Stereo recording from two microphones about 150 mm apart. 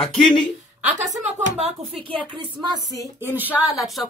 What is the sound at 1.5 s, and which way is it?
Speech, 45° right (ahead or behind).